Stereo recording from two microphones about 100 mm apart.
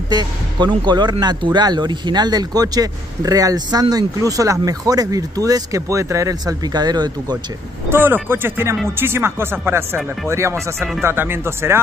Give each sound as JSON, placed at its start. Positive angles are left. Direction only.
{"t": 0.1, "sound": "speech", "side_deg": -45}
{"t": 7.9, "sound": "speech", "side_deg": -20}